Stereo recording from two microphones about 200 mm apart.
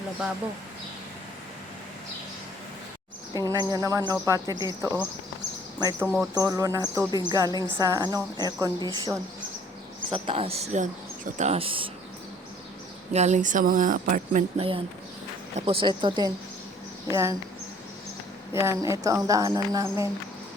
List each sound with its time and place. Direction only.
3.3 s speech: 20° right (ahead or behind)
6.3 s a woman's voice: 15° right (ahead or behind)
13.1 s speech: 35° right (ahead or behind)
14.6 s a woman's voice: 25° right (ahead or behind)
18.5 s speech: 15° right (ahead or behind)